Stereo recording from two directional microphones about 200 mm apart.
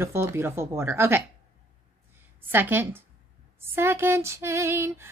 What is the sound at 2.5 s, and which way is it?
A woman's voice, 10° right (ahead or behind).